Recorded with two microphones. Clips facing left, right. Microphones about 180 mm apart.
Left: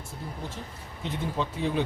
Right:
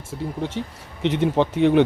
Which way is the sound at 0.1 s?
90° right.